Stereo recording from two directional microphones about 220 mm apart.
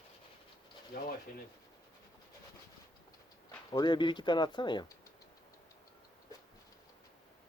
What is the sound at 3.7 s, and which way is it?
Speech, 20° left (ahead or behind).